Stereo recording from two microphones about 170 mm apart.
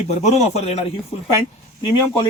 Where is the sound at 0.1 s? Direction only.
40° left (ahead or behind).